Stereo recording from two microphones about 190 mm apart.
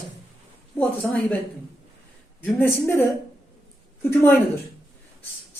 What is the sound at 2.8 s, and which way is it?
Speech, 10° left (ahead or behind).